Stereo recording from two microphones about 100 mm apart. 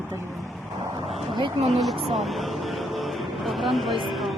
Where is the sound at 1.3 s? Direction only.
55° right (ahead or behind).